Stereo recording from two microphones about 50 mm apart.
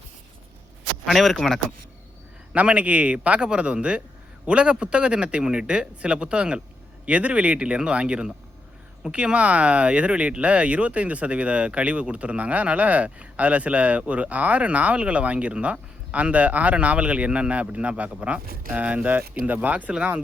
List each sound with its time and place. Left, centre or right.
1.0 s speech: centre
2.5 s speech: right